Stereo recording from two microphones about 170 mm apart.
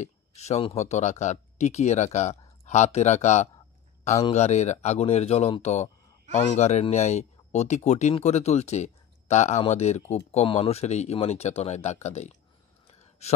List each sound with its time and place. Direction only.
0.0 s speech: 40° left (ahead or behind)